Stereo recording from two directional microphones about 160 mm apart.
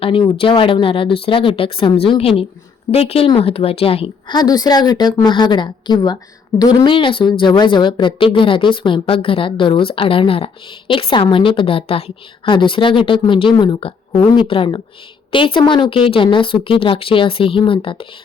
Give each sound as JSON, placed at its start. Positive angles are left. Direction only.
{"t": 0.0, "sound": "a woman's voice", "side_deg": 35}